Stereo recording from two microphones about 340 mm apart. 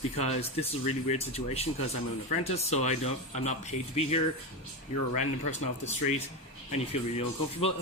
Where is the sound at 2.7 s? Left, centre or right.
Centre.